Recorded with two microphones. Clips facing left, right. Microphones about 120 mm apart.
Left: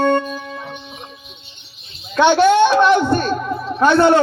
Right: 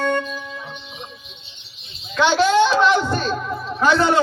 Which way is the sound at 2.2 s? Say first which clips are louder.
Left 4 dB; 60° left (ahead or behind).